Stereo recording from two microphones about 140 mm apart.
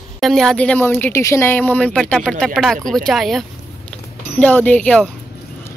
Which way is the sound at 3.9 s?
10° left (ahead or behind).